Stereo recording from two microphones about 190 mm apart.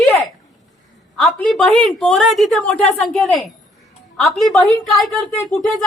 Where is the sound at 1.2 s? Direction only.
10° left (ahead or behind).